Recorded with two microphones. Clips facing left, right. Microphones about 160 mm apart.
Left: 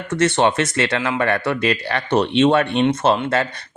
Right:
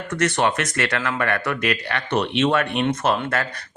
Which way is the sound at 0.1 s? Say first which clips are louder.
Left 4 dB; 25° left (ahead or behind).